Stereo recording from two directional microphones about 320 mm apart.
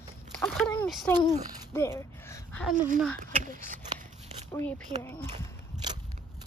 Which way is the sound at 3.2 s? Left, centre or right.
Right.